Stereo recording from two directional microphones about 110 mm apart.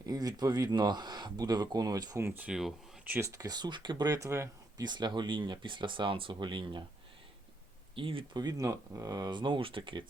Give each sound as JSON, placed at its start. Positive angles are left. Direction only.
{"t": 0.0, "sound": "speech", "side_deg": -35}
{"t": 2.2, "sound": "speech", "side_deg": -20}
{"t": 2.5, "sound": "speech", "side_deg": 0}
{"t": 3.0, "sound": "speech", "side_deg": -15}
{"t": 3.2, "sound": "speech", "side_deg": -30}
{"t": 4.8, "sound": "speech", "side_deg": -40}
{"t": 7.9, "sound": "speech", "side_deg": -55}
{"t": 8.4, "sound": "speech", "side_deg": -35}